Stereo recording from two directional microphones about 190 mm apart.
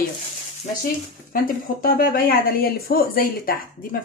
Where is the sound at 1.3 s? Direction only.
45° left (ahead or behind).